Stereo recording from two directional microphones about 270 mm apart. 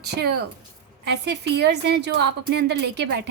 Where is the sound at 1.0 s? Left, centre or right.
Right.